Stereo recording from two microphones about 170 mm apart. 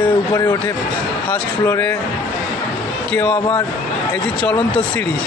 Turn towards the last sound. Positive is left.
turn(degrees=5)  # may be behind; listen again after turning